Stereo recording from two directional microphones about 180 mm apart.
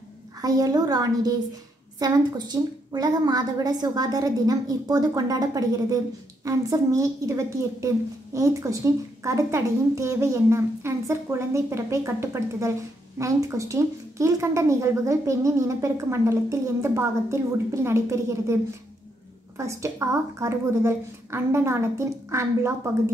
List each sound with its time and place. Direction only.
0.4 s a woman's voice: 20° right (ahead or behind)